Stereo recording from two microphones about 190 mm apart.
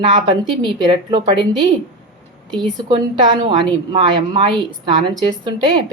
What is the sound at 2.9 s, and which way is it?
A woman's voice, 25° right (ahead or behind).